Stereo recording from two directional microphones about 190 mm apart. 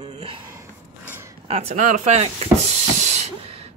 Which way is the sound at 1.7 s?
45° right (ahead or behind).